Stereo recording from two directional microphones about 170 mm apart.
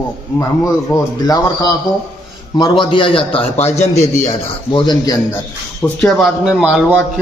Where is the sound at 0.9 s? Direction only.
20° left (ahead or behind).